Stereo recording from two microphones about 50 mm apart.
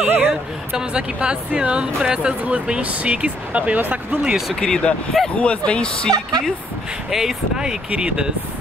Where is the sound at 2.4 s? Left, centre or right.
Right.